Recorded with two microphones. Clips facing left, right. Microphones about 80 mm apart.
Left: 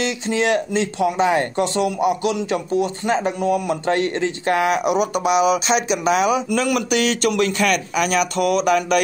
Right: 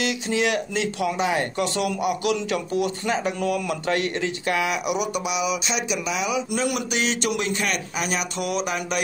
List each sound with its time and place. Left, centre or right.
0.0 s speech: left
1.8 s a man's voice: left